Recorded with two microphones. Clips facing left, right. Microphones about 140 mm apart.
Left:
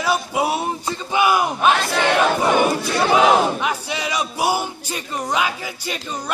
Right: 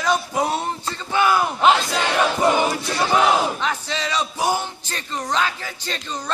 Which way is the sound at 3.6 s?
10° left (ahead or behind).